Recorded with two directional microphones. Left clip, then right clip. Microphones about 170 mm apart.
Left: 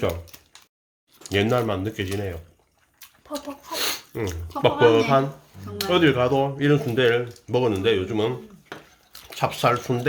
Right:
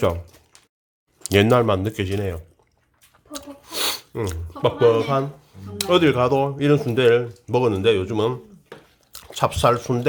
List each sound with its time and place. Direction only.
1.2 s speech: 45° right (ahead or behind)
3.3 s a sound: 30° right (ahead or behind)
4.6 s speech: 15° right (ahead or behind)
5.9 s speech: 30° right (ahead or behind)
9.3 s speech: 30° right (ahead or behind)